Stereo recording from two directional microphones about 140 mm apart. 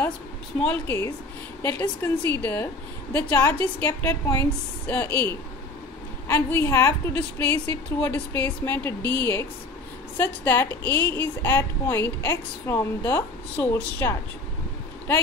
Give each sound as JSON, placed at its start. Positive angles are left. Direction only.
{"t": 0.6, "sound": "a woman's voice", "side_deg": 10}